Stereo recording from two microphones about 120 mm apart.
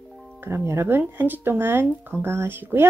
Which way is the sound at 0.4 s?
20° right (ahead or behind).